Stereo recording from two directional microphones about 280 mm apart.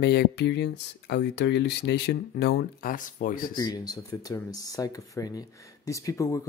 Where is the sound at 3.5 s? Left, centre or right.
Centre.